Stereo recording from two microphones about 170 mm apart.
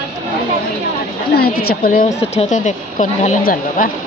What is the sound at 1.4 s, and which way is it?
Speech, 65° left (ahead or behind).